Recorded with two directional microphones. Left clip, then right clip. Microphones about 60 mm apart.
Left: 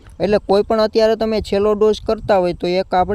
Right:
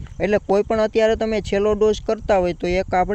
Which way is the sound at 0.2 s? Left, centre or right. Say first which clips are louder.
Left 3 dB; left.